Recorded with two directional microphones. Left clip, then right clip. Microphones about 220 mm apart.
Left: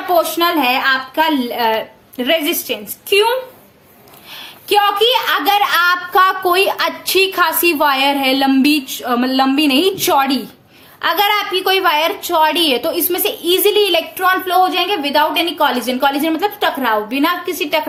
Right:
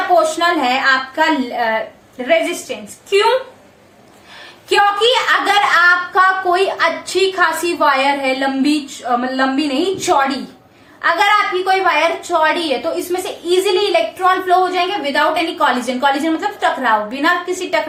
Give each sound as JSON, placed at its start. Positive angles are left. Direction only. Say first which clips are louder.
{"t": 0.3, "sound": "a woman's voice", "louder": "left 1 dB", "side_deg": 45}
{"t": 4.9, "sound": "a woman's voice", "louder": "even", "side_deg": 45}